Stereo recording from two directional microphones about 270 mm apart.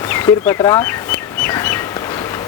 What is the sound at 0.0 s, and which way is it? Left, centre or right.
Bird, centre.